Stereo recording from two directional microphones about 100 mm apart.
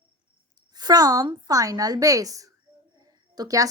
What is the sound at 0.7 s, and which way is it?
A woman's voice, 40° right (ahead or behind).